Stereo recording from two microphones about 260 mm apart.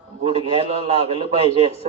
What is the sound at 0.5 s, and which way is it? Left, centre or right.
Speech, right.